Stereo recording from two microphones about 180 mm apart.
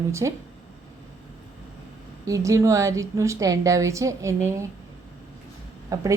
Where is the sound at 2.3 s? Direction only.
15° right (ahead or behind).